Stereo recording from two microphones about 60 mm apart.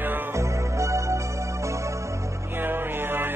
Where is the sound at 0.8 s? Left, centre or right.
Right.